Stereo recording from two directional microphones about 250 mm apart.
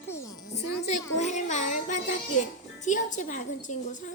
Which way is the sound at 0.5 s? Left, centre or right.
Left.